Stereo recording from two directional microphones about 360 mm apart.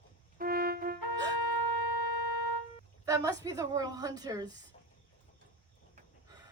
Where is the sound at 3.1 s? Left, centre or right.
Centre.